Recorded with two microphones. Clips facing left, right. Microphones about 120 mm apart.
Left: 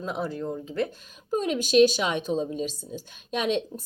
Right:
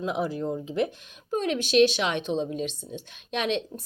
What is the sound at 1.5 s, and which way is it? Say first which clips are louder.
Speech: left 2 dB; 45° left (ahead or behind).